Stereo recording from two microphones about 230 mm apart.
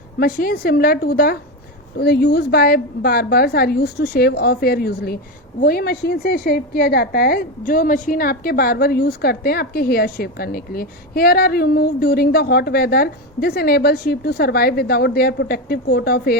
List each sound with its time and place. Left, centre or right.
0.2 s a woman's voice: left